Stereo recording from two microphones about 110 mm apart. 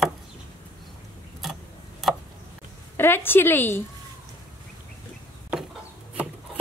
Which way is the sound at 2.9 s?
20° left (ahead or behind).